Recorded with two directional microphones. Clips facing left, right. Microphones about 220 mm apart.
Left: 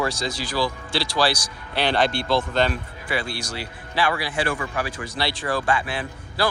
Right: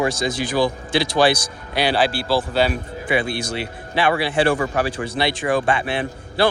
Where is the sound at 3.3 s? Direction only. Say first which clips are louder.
Right 6 dB; 55° right (ahead or behind).